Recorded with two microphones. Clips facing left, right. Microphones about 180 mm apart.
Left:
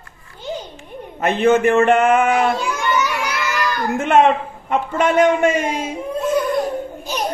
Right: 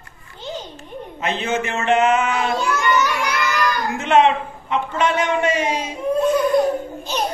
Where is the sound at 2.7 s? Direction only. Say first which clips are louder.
Right 1 dB; 10° left (ahead or behind).